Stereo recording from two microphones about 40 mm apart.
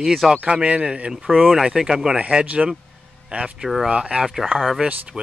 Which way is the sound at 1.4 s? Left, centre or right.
Centre.